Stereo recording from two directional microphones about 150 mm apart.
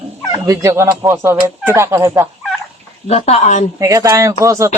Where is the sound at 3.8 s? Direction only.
20° right (ahead or behind).